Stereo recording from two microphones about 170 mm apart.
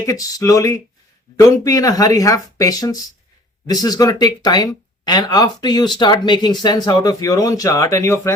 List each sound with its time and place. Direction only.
0.0 s speech: 20° left (ahead or behind)